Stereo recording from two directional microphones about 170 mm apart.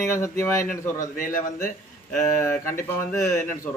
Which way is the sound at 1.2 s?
50° left (ahead or behind).